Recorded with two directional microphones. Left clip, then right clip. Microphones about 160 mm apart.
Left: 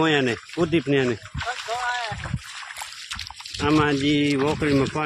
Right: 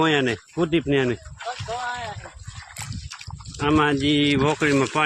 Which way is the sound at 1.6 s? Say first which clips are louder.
Left 2 dB; centre (ahead or behind).